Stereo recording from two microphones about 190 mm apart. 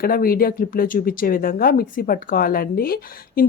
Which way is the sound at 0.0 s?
50° left (ahead or behind).